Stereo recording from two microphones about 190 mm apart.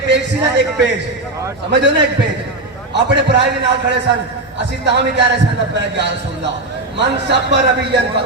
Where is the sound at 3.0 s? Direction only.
65° right (ahead or behind).